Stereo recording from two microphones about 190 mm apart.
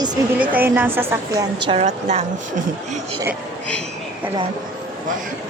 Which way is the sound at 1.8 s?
35° right (ahead or behind).